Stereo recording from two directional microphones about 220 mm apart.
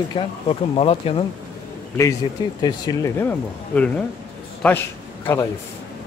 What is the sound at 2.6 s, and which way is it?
Speech, 15° left (ahead or behind).